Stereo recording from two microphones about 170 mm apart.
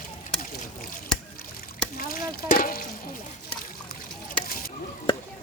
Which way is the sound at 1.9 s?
55° left (ahead or behind).